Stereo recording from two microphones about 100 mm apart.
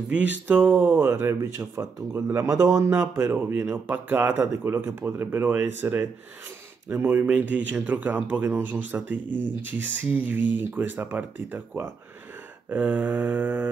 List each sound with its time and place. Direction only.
0.1 s speech: 15° right (ahead or behind)
2.4 s speech: 35° right (ahead or behind); by 13.7 s 15° right (ahead or behind)